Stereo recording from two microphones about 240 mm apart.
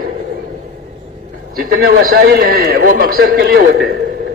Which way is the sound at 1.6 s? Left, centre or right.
Right.